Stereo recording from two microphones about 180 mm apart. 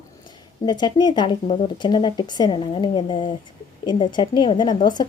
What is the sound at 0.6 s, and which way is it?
A woman's voice, 25° left (ahead or behind).